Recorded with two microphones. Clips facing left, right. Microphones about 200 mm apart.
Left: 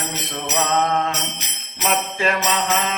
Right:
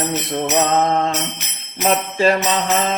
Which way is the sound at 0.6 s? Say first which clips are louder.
Right 2 dB; 35° right (ahead or behind).